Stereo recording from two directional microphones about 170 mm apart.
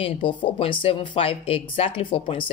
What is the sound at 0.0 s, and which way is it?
Speech, 30° left (ahead or behind).